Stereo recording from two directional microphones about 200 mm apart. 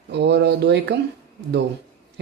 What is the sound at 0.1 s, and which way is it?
Speech, 55° right (ahead or behind).